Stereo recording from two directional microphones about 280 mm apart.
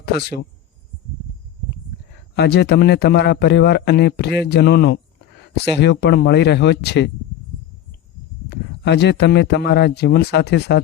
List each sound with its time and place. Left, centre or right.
2.3 s a man's voice: left
8.4 s a man's voice: left